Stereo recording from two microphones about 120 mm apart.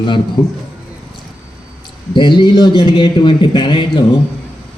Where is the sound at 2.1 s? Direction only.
40° left (ahead or behind).